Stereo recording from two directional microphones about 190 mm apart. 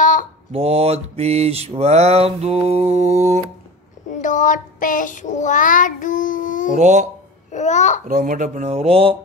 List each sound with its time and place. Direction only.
0.0 s mantra: 45° left (ahead or behind)
0.5 s mantra: 35° right (ahead or behind)
4.1 s child singing: 40° left (ahead or behind)
6.7 s mantra: 40° right (ahead or behind)
7.5 s a child's voice: 40° left (ahead or behind)
8.1 s mantra: 45° right (ahead or behind)